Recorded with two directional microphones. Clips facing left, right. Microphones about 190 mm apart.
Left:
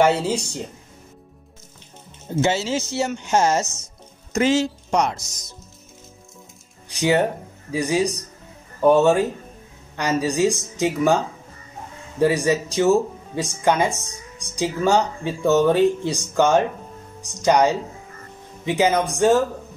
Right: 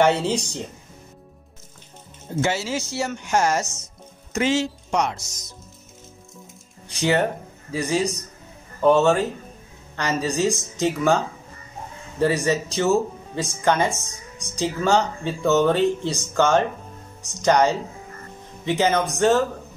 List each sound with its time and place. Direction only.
0.0 s a woman's voice: 5° left (ahead or behind)
2.4 s speech: 25° left (ahead or behind)
4.3 s speech: 40° left (ahead or behind)
7.0 s speech: 10° left (ahead or behind)
12.2 s speech: 10° left (ahead or behind)